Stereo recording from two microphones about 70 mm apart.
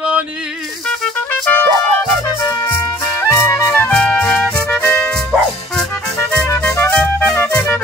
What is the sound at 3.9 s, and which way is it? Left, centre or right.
Speech, centre.